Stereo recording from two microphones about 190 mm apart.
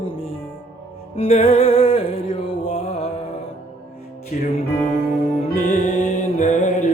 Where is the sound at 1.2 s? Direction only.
30° left (ahead or behind).